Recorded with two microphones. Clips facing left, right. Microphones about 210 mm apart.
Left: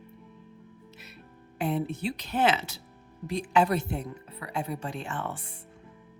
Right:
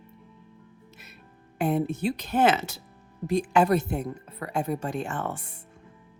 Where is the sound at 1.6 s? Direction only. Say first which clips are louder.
Right 4 dB; 45° right (ahead or behind).